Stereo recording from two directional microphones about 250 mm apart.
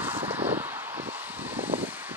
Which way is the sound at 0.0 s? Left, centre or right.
Centre.